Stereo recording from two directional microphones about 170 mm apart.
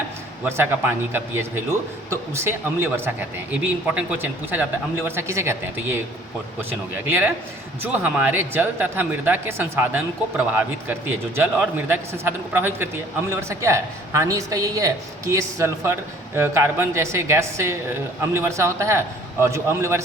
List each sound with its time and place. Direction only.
0.4 s a woman's voice: 15° right (ahead or behind)